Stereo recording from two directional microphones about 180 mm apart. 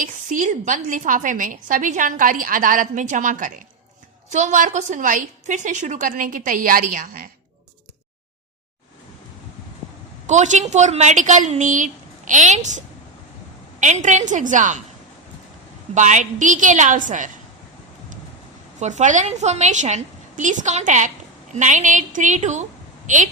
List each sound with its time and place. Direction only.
0.0 s a woman's voice: 45° right (ahead or behind)
10.2 s a woman's voice: 40° right (ahead or behind)
16.0 s a woman's voice: 40° right (ahead or behind)
18.8 s a woman's voice: 40° right (ahead or behind)